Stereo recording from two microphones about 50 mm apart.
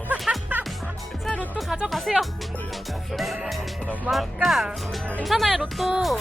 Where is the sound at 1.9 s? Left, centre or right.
Centre.